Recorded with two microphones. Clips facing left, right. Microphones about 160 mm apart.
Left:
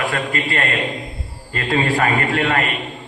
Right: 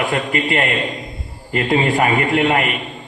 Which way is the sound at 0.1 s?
20° right (ahead or behind).